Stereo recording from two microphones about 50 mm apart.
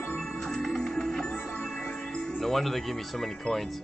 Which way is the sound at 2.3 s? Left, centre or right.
Centre.